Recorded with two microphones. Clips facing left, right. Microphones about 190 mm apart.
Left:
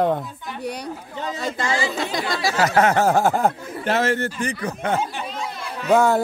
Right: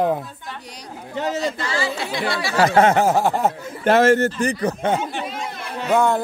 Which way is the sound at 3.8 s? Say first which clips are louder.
Right 6 dB; 50° right (ahead or behind).